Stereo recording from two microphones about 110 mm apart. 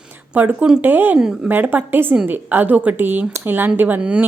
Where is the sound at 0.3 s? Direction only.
15° right (ahead or behind).